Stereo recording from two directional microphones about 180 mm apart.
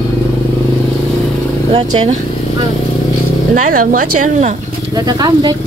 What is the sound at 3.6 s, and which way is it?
Speech, 50° right (ahead or behind).